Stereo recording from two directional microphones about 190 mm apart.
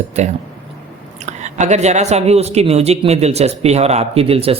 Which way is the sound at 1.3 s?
40° right (ahead or behind).